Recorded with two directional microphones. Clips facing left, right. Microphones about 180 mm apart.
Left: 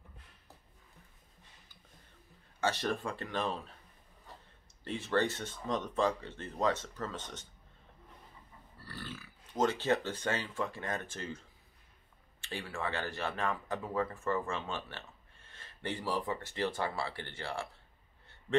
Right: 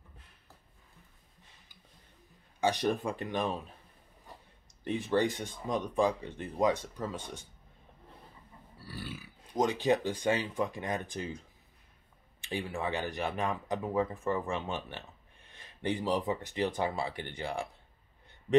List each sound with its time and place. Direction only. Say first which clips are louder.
2.6 s speech: right 4 dB; 15° right (ahead or behind)
4.8 s speech: right 3 dB; 15° right (ahead or behind)
8.7 s speech: right 3 dB; 10° right (ahead or behind)